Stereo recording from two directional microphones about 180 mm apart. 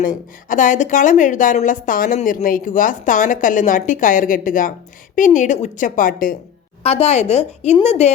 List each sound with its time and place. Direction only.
0.0 s a woman's voice: 50° left (ahead or behind)
6.8 s a woman's voice: 35° left (ahead or behind)